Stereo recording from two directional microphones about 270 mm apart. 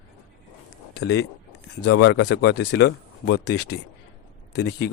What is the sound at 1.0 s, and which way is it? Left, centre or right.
Speech, left.